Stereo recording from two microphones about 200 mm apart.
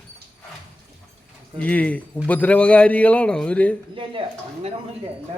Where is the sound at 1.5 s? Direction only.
5° left (ahead or behind).